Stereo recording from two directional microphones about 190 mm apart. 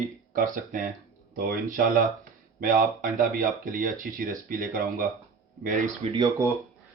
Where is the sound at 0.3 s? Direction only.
45° right (ahead or behind).